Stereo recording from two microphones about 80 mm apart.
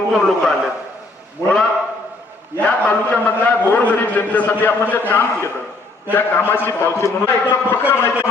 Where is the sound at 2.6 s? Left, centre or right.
Centre; by 7.3 s left.